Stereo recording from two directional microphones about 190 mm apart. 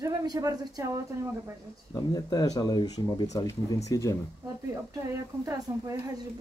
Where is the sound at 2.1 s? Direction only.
20° left (ahead or behind).